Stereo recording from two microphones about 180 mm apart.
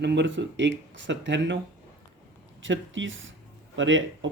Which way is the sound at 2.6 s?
90° right.